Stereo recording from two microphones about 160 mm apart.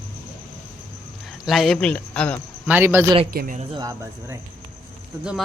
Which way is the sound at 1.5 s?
Centre (ahead or behind).